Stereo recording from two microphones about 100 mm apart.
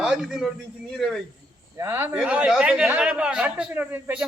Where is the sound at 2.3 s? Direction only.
10° right (ahead or behind).